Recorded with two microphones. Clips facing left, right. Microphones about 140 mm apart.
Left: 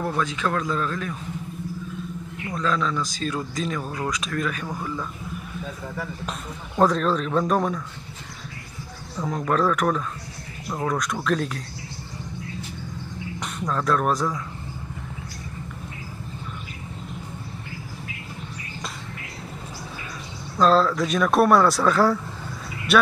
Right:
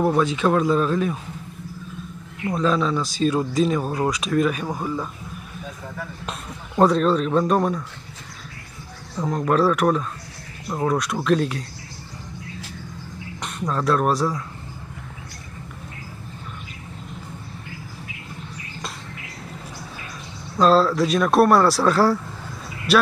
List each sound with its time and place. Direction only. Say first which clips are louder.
0.0 s speech: right 6 dB; 20° right (ahead or behind)
2.4 s speech: right 5 dB; 20° right (ahead or behind)
6.8 s speech: right 3 dB; 5° right (ahead or behind)
9.2 s speech: right 3 dB; 5° right (ahead or behind)
13.7 s speech: right 2 dB; 5° right (ahead or behind)
20.5 s speech: right 2 dB; 5° right (ahead or behind)